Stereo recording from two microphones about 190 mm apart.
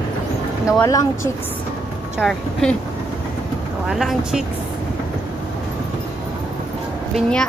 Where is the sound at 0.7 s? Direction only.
15° left (ahead or behind).